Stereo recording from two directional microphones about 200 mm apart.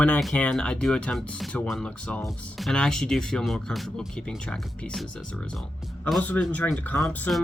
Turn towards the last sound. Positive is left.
turn(degrees=5)  # may be behind; listen again after turning